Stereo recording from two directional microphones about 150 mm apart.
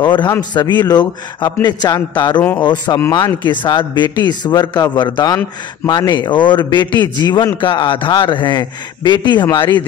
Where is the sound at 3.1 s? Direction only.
30° left (ahead or behind).